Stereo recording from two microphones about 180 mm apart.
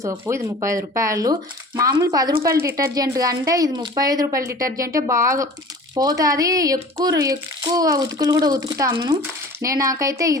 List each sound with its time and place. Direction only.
0.0 s speech: 15° right (ahead or behind)